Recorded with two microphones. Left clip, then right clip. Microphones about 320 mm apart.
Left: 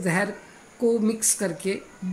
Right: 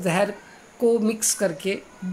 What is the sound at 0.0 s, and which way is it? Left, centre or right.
Speech, centre.